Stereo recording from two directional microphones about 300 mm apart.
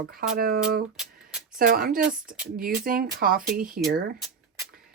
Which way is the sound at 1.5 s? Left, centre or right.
Right.